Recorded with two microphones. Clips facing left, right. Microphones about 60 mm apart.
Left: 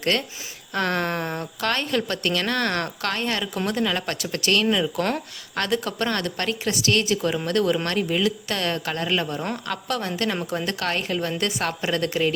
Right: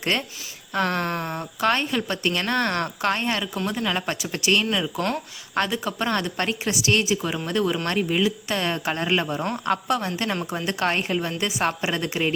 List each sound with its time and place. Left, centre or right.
0.0 s speech: right
0.7 s a woman's voice: centre
1.4 s speech: centre
3.3 s a woman's voice: centre; by 11.2 s right
11.2 s a woman's voice: centre